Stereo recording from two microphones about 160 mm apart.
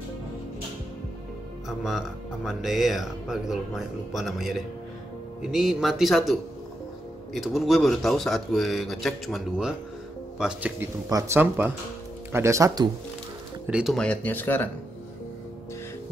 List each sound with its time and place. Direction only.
1.7 s speech: centre (ahead or behind)
7.3 s speech: centre (ahead or behind)
11.1 s speech: 15° right (ahead or behind)
13.7 s speech: 5° right (ahead or behind)
13.9 s speech: 5° left (ahead or behind)